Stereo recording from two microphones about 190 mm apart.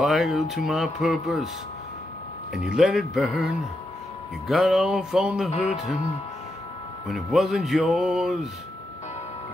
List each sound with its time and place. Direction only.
0.0 s speech: centre (ahead or behind)
2.5 s speech: centre (ahead or behind)
4.5 s speech: centre (ahead or behind)
5.5 s music: 30° left (ahead or behind)
7.1 s speech: centre (ahead or behind)